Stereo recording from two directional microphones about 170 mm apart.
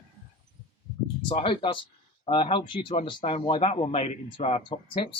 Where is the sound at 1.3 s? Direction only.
30° left (ahead or behind).